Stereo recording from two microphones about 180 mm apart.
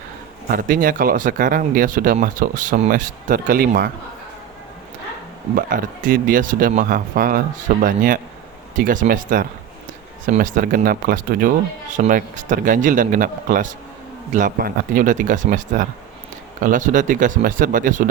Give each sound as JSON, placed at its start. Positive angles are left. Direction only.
{"t": 0.4, "sound": "speech", "side_deg": -50}
{"t": 5.5, "sound": "speech", "side_deg": -50}